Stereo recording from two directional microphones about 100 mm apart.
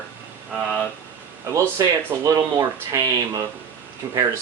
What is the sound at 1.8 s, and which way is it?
Speech, 35° right (ahead or behind).